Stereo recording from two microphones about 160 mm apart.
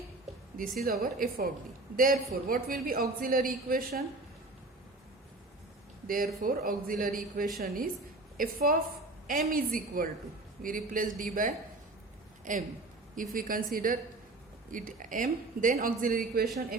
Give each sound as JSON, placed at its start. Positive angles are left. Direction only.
{"t": 0.8, "sound": "a woman's voice", "side_deg": -65}
{"t": 6.1, "sound": "a woman's voice", "side_deg": -60}
{"t": 16.3, "sound": "speech", "side_deg": -70}